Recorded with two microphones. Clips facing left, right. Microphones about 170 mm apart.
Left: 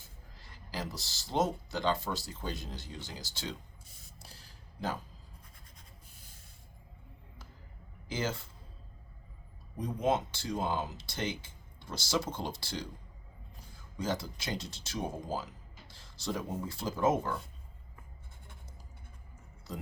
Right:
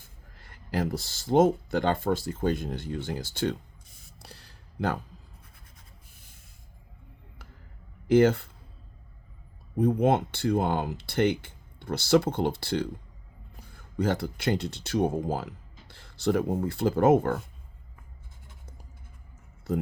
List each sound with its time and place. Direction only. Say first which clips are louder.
0.3 s speech: right 10 dB; 55° right (ahead or behind)
4.2 s a sound: right 7 dB; 65° right (ahead or behind)
8.0 s speech: right 16 dB; 60° right (ahead or behind)
9.7 s speech: right 8 dB; 60° right (ahead or behind)